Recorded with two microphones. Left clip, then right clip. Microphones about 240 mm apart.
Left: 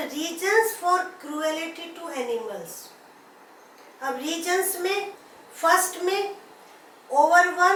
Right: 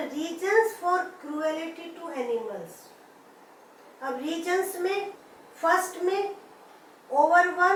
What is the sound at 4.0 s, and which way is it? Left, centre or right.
A woman's voice, centre.